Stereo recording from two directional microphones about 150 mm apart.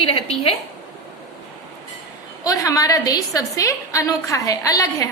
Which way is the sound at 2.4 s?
25° left (ahead or behind).